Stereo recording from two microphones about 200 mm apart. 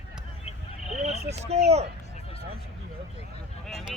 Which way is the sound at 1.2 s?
30° right (ahead or behind).